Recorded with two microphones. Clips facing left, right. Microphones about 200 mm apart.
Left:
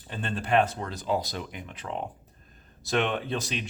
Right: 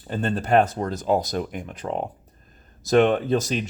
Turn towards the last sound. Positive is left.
turn(degrees=-45)  # may be behind; listen again after turning